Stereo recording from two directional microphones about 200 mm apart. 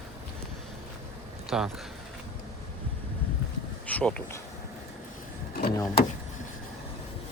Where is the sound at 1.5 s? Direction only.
5° right (ahead or behind).